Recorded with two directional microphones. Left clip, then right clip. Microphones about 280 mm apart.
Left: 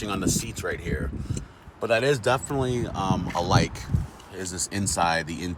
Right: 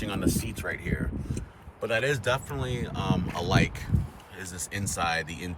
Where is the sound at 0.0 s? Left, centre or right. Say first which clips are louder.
Left 2 dB; centre.